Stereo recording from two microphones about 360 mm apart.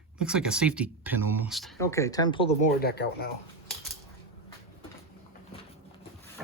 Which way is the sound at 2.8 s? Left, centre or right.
Left.